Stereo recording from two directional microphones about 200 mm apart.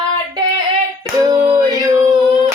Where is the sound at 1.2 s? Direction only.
20° right (ahead or behind).